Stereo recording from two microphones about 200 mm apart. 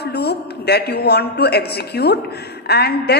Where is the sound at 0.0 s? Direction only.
55° left (ahead or behind).